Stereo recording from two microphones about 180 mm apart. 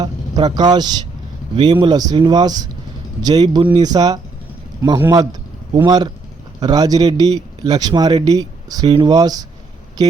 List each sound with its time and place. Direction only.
0.0 s a man's voice: 25° right (ahead or behind)